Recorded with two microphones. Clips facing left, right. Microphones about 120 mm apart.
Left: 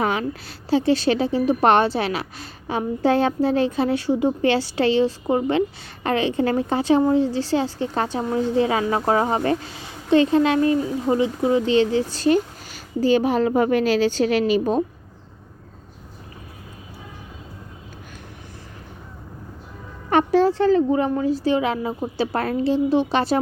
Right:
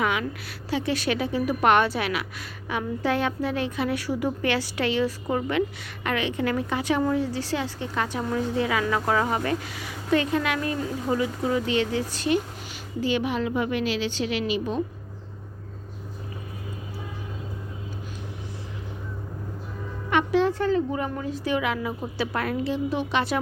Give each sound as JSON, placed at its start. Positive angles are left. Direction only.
{"t": 0.0, "sound": "a woman's voice", "side_deg": 35}
{"t": 20.1, "sound": "a woman's voice", "side_deg": 40}